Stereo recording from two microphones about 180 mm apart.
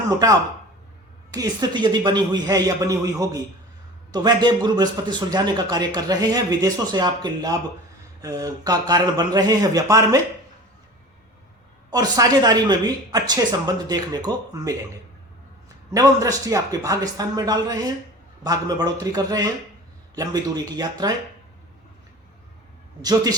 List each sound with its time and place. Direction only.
0.2 s a man's voice: 20° right (ahead or behind)
11.9 s a man's voice: 20° right (ahead or behind)
15.9 s a man's voice: 20° right (ahead or behind)
23.0 s a man's voice: 20° right (ahead or behind)